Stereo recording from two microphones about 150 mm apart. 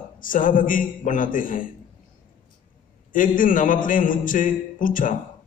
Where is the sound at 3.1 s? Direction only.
60° left (ahead or behind).